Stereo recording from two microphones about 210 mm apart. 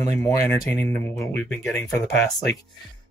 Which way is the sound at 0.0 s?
15° left (ahead or behind).